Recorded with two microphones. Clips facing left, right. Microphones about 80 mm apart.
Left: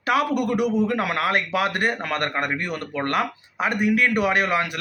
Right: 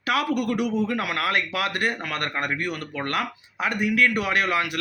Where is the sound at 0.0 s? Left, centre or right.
Left.